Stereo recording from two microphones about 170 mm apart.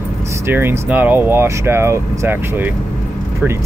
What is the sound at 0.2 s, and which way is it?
Speech, 15° right (ahead or behind).